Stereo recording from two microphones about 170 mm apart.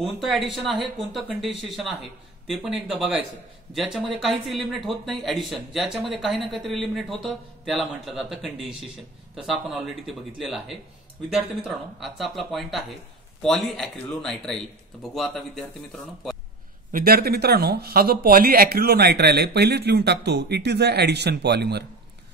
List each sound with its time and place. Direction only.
0.0 s speech: centre (ahead or behind)
16.9 s speech: 65° right (ahead or behind)